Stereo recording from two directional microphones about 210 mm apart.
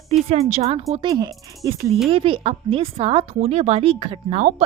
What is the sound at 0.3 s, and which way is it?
A woman's voice, 35° right (ahead or behind).